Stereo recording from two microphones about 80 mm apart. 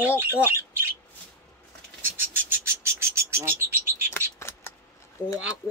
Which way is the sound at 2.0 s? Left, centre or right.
Right.